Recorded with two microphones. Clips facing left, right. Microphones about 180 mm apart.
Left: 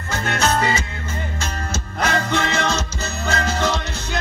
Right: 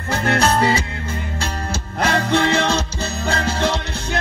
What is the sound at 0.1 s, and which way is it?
Music, 35° right (ahead or behind).